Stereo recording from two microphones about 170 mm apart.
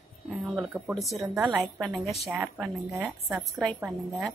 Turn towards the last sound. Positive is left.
turn(degrees=0)  # may be behind; listen again after turning